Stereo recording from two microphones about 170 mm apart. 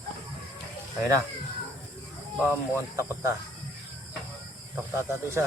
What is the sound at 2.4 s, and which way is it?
Speech, 15° right (ahead or behind).